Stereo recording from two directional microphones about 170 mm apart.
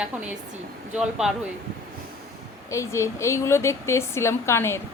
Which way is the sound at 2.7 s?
15° left (ahead or behind).